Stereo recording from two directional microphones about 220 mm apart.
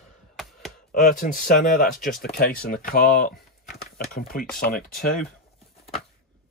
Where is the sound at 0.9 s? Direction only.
40° left (ahead or behind).